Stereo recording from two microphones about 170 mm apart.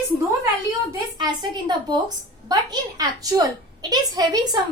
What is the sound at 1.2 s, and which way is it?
A child's voice, 25° right (ahead or behind).